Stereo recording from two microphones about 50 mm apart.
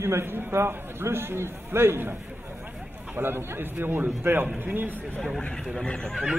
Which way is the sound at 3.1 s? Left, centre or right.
Right.